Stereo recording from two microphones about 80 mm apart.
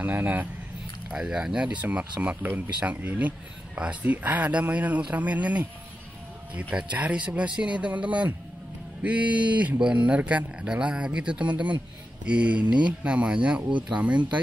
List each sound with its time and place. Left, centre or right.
0.0 s speech: right
1.1 s speech: centre
6.7 s speech: centre